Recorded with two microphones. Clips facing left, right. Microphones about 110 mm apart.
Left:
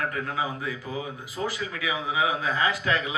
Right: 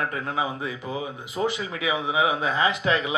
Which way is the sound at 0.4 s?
20° right (ahead or behind).